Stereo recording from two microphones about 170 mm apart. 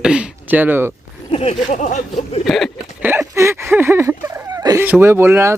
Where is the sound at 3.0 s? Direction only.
10° right (ahead or behind).